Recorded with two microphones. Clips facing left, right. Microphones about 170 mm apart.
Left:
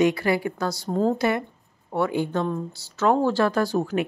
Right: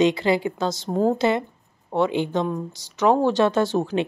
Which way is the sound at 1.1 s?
25° right (ahead or behind).